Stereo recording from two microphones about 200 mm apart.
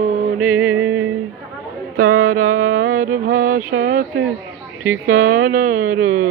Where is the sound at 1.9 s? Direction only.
45° right (ahead or behind).